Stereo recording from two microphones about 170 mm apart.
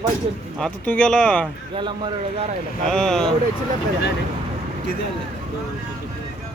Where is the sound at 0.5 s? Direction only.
5° left (ahead or behind).